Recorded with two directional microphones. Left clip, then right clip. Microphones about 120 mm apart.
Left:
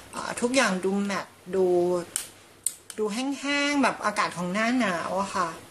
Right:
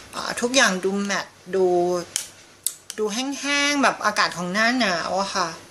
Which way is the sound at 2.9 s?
5° left (ahead or behind).